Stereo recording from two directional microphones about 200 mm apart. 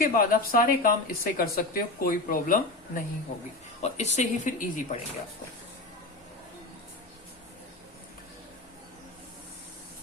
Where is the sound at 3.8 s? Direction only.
35° left (ahead or behind).